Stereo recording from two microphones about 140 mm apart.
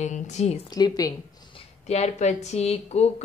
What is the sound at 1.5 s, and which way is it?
Speech, 50° left (ahead or behind).